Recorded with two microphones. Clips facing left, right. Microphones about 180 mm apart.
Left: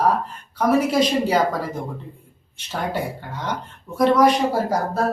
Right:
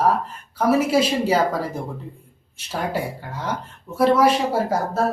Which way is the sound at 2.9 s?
5° right (ahead or behind).